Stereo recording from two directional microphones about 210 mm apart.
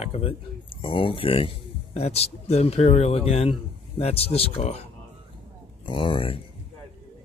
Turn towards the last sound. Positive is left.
turn(degrees=25)  # may be behind; listen again after turning